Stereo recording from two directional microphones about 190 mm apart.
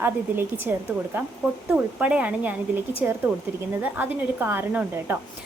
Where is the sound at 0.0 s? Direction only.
10° right (ahead or behind).